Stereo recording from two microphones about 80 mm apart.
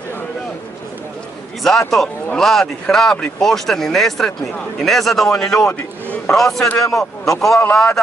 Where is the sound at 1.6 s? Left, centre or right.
Centre.